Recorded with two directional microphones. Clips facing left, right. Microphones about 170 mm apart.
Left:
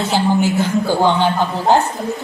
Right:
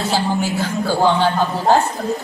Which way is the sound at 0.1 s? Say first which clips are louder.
Left 5 dB; 20° left (ahead or behind).